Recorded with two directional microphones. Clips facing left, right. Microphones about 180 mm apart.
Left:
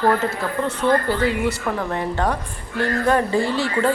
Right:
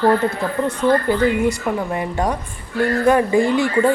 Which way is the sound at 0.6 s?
15° right (ahead or behind).